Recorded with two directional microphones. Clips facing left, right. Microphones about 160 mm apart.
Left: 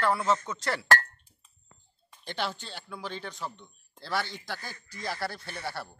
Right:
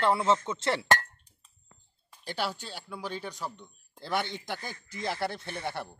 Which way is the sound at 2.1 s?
10° right (ahead or behind).